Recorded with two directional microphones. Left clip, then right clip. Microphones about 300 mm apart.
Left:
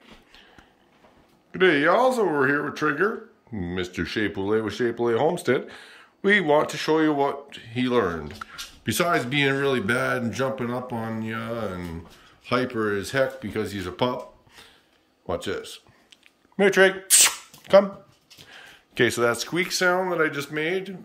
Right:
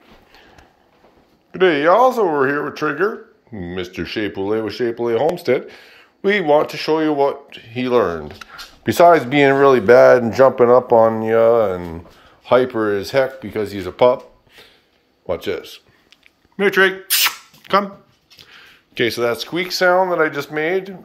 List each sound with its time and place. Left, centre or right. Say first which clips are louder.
1.5 s speech: right 6 dB; centre
10.0 s speech: right 15 dB; right
11.1 s speech: right 18 dB; centre
15.2 s a sound: right 6 dB; centre
18.4 s speech: right 3 dB; centre